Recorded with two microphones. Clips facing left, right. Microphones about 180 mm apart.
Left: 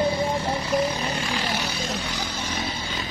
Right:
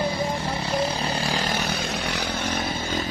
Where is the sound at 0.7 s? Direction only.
30° right (ahead or behind).